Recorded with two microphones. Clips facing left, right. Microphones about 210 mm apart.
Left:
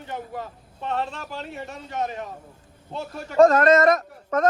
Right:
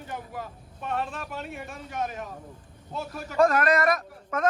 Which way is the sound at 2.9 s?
25° left (ahead or behind).